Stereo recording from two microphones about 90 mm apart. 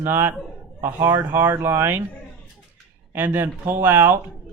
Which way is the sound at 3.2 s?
25° right (ahead or behind).